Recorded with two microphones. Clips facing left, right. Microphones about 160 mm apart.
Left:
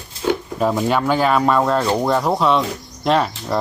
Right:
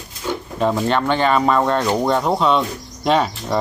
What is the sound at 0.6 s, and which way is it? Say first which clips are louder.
Cricket: right 1 dB; 5° left (ahead or behind).